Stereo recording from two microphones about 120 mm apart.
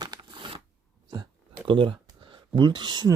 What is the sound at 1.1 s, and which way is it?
Speech, 40° right (ahead or behind).